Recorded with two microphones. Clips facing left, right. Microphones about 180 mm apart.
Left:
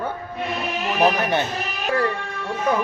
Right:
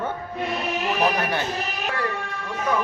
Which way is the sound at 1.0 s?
20° left (ahead or behind).